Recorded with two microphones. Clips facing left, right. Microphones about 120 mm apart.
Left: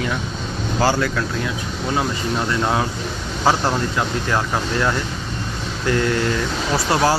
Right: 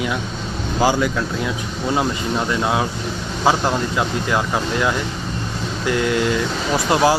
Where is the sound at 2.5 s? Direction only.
10° right (ahead or behind).